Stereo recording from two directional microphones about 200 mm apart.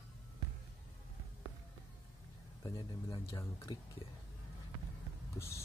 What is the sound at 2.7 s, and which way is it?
Speech, 20° left (ahead or behind).